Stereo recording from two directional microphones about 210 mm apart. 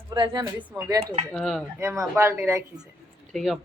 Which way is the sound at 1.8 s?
10° right (ahead or behind).